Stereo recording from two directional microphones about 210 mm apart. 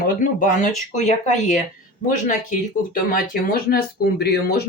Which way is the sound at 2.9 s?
40° left (ahead or behind).